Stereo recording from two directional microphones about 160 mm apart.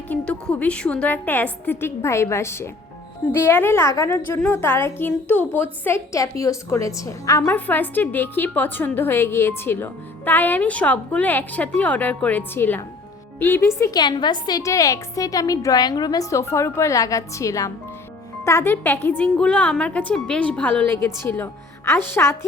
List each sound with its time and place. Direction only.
0.1 s a woman's voice: 10° left (ahead or behind)
14.0 s a woman's voice: 25° left (ahead or behind)